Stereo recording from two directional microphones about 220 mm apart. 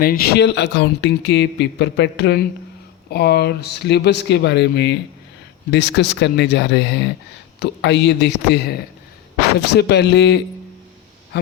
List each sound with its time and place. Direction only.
0.0 s speech: 45° left (ahead or behind)